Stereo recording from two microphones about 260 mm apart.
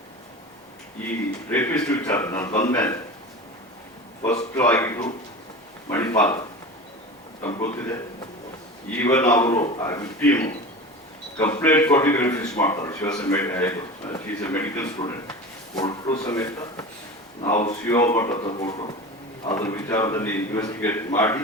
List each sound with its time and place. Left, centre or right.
1.5 s a man's voice: centre
4.5 s a man's voice: centre
7.4 s a man's voice: centre
9.0 s a man's voice: centre